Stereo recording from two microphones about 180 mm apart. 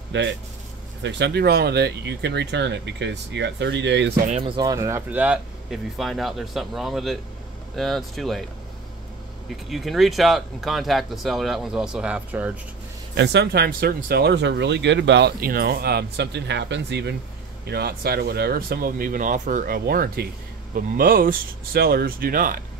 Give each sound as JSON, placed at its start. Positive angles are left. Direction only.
{"t": 0.1, "sound": "speech", "side_deg": -90}
{"t": 1.0, "sound": "speech", "side_deg": -75}
{"t": 4.3, "sound": "speech", "side_deg": -35}
{"t": 4.6, "sound": "speech", "side_deg": -20}
{"t": 9.7, "sound": "speech", "side_deg": 0}
{"t": 13.1, "sound": "speech", "side_deg": -70}